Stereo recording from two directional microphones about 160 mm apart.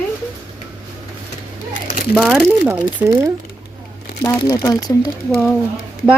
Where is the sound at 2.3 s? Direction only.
15° right (ahead or behind).